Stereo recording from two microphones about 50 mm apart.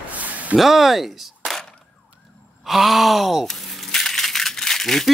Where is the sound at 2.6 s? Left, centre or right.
Centre.